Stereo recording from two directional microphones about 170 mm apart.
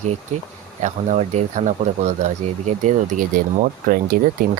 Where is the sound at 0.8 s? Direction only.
40° right (ahead or behind); by 4.2 s 55° right (ahead or behind).